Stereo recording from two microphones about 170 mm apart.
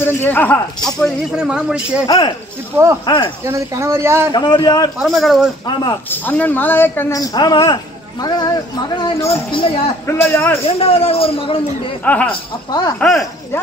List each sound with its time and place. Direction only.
0.0 s speech: 10° left (ahead or behind); by 2.0 s 5° right (ahead or behind)
2.0 s a man's voice: 30° left (ahead or behind)
3.4 s a man's voice: 15° right (ahead or behind)
4.3 s a man's voice: 25° left (ahead or behind)
4.9 s a man's voice: centre (ahead or behind); by 9.4 s 20° left (ahead or behind)
9.5 s a man's voice: 30° left (ahead or behind)
10.0 s speech: 10° left (ahead or behind)
10.6 s a man's voice: 35° left (ahead or behind)
12.0 s speech: 10° left (ahead or behind)
12.3 s a man's voice: 25° left (ahead or behind)
13.0 s speech: centre (ahead or behind)